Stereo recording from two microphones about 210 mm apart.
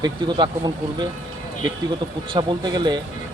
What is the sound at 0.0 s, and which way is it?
Speech, 20° right (ahead or behind).